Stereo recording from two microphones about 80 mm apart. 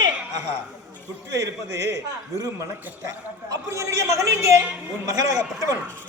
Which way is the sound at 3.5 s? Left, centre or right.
Right.